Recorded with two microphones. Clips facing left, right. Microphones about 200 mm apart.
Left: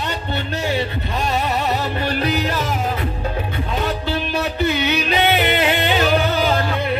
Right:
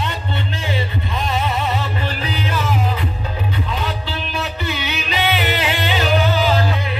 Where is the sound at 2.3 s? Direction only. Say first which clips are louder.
Left 2 dB; 40° left (ahead or behind).